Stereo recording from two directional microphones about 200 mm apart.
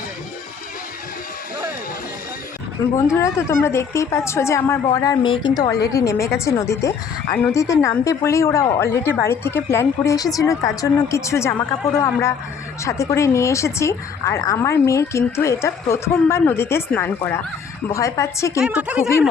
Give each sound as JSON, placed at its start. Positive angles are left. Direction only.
{"t": 3.1, "sound": "a woman's voice", "side_deg": 15}
{"t": 18.6, "sound": "speech", "side_deg": -5}